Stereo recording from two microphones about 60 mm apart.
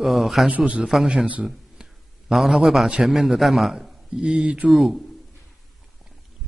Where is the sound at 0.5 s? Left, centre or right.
Centre.